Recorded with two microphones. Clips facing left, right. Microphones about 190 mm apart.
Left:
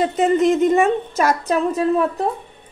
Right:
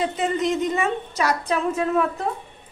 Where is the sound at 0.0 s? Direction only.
45° left (ahead or behind).